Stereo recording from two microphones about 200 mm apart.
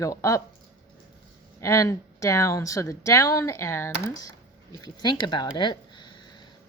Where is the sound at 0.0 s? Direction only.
15° left (ahead or behind).